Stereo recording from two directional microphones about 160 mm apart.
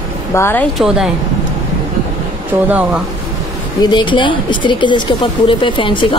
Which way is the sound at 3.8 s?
30° left (ahead or behind).